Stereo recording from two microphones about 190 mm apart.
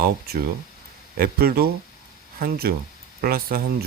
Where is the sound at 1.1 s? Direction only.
55° right (ahead or behind).